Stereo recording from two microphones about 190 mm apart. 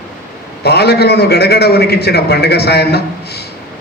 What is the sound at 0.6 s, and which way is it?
A man's voice, 60° left (ahead or behind).